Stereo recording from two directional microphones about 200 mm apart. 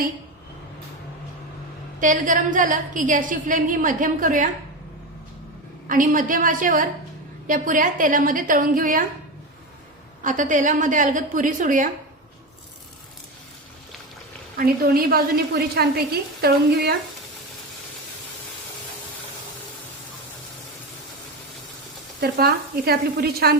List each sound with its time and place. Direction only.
2.0 s a woman's voice: 40° right (ahead or behind)
5.9 s a woman's voice: 40° right (ahead or behind)
10.2 s a woman's voice: 40° right (ahead or behind)
15.1 s a woman's voice: 55° right (ahead or behind)
22.2 s a woman's voice: 50° right (ahead or behind)